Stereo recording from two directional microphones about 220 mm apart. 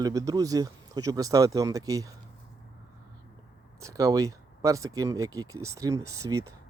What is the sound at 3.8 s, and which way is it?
Speech, 15° right (ahead or behind).